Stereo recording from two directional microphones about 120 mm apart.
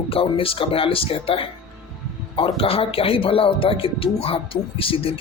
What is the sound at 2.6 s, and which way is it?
Speech, 50° left (ahead or behind).